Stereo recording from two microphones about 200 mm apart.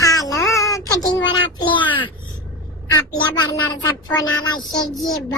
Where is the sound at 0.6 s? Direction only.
15° left (ahead or behind).